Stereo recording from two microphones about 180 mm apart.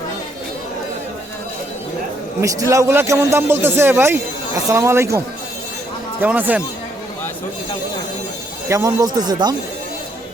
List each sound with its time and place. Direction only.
2.4 s speech: 15° right (ahead or behind)
8.7 s speech: 20° right (ahead or behind)